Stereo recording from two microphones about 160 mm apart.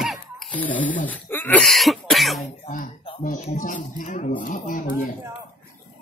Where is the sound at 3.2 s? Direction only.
50° left (ahead or behind).